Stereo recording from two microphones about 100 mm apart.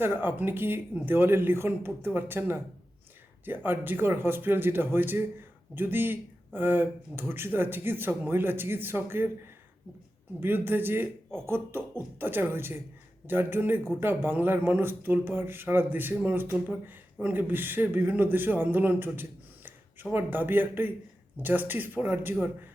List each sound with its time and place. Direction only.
0.0 s speech: 20° right (ahead or behind)
10.7 s speech: 20° right (ahead or behind)